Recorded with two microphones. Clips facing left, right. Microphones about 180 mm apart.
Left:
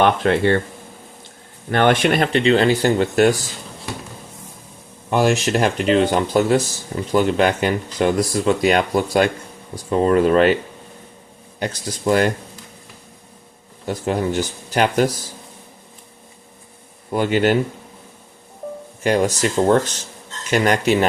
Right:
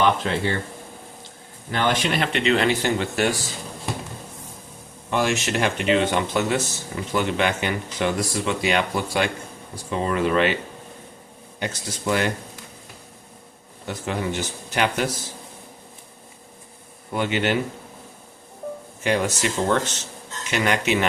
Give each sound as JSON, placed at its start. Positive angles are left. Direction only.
{"t": 0.0, "sound": "speech", "side_deg": 60}
{"t": 1.7, "sound": "speech", "side_deg": 60}
{"t": 5.1, "sound": "speech", "side_deg": 35}
{"t": 11.6, "sound": "speech", "side_deg": 40}
{"t": 13.8, "sound": "speech", "side_deg": 40}
{"t": 17.2, "sound": "speech", "side_deg": 40}
{"t": 19.0, "sound": "speech", "side_deg": 40}